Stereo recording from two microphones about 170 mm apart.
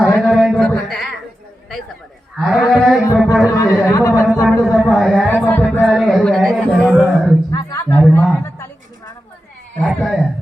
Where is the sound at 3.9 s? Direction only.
20° left (ahead or behind).